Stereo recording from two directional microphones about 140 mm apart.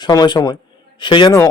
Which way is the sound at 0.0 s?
30° left (ahead or behind).